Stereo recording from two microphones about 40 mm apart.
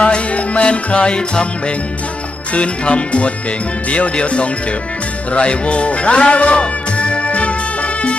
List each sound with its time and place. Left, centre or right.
0.0 s music: left
3.8 s speech: left
5.3 s music: left